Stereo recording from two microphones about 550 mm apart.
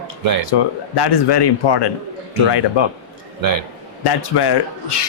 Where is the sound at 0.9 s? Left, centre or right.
Left.